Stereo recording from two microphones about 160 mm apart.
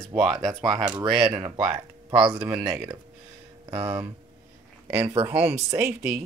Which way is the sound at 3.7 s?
10° right (ahead or behind).